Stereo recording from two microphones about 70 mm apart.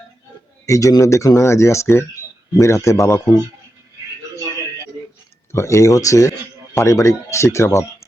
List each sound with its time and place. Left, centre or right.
0.6 s speech: left
5.5 s speech: left